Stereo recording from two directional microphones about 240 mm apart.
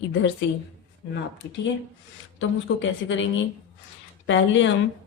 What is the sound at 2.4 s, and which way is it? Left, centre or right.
Speech, left.